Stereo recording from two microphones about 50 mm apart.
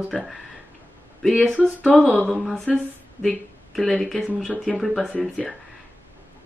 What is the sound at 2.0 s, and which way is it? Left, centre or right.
Speech, right.